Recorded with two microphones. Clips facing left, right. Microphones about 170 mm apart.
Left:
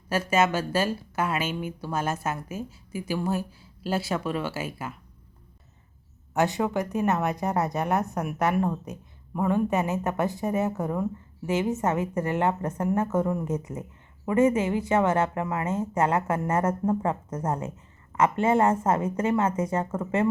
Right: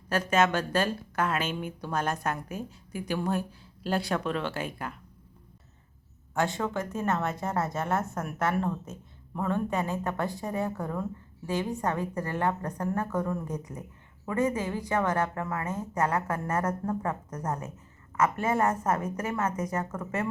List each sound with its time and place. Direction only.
0.1 s speech: 10° left (ahead or behind)
6.3 s a woman's voice: 20° left (ahead or behind)